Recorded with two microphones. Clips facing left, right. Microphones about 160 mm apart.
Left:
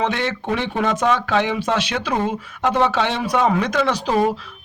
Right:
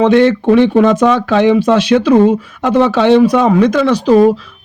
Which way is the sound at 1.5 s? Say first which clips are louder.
Right 12 dB; 35° right (ahead or behind).